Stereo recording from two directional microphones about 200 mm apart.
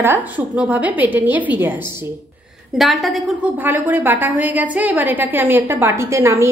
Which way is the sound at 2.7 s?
Centre (ahead or behind).